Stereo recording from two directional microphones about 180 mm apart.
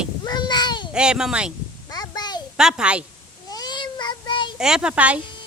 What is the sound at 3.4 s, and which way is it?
Child singing, 20° left (ahead or behind).